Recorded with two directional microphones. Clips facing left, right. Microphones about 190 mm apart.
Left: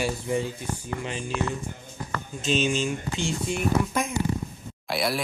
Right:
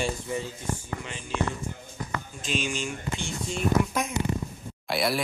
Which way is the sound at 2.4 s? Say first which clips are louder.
Left 7 dB; 25° left (ahead or behind).